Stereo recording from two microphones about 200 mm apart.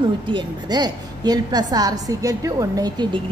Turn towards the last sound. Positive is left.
turn(degrees=-20)  # may be behind; listen again after turning